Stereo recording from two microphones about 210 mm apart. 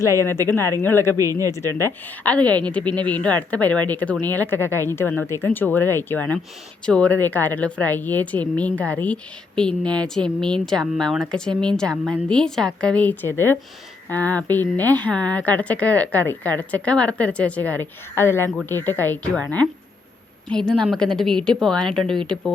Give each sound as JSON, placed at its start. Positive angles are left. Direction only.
{"t": 0.4, "sound": "a woman's voice", "side_deg": 10}
{"t": 1.1, "sound": "speech", "side_deg": -15}
{"t": 1.5, "sound": "a woman's voice", "side_deg": 10}